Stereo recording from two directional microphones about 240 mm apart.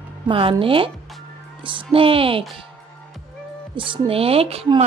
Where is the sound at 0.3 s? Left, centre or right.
Right.